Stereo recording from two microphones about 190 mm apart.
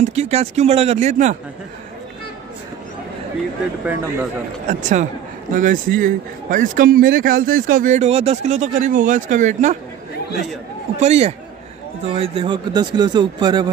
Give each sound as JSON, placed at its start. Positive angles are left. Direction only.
{"t": 0.0, "sound": "speech", "side_deg": -35}
{"t": 3.8, "sound": "a man's voice", "side_deg": -10}
{"t": 4.6, "sound": "a man's voice", "side_deg": -40}
{"t": 11.0, "sound": "speech", "side_deg": -35}